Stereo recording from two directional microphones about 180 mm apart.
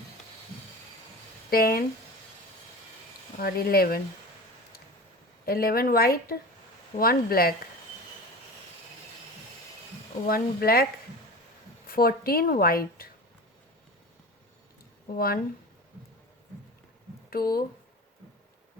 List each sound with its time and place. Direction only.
1.5 s speech: 55° left (ahead or behind)
3.3 s a woman's voice: 55° left (ahead or behind)
5.5 s a woman's voice: 55° left (ahead or behind)
10.2 s a woman's voice: 55° left (ahead or behind)
11.9 s a woman's voice: 55° left (ahead or behind)
15.1 s a woman's voice: 55° left (ahead or behind)
17.2 s speech: 55° left (ahead or behind)